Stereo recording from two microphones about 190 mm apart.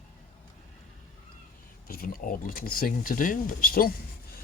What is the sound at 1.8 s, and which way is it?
Speech, 50° left (ahead or behind).